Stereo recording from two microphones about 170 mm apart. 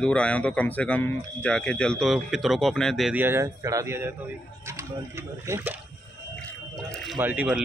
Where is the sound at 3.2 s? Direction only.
15° right (ahead or behind).